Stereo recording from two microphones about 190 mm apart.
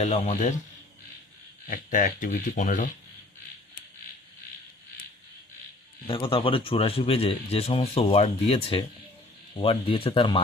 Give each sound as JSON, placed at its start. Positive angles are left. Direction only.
{"t": 0.0, "sound": "a man's voice", "side_deg": 35}
{"t": 1.6, "sound": "speech", "side_deg": 45}
{"t": 6.1, "sound": "speech", "side_deg": 25}